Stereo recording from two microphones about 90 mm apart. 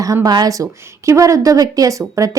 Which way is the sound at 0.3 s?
45° right (ahead or behind).